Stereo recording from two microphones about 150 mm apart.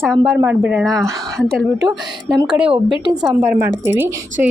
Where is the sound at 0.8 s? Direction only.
5° left (ahead or behind).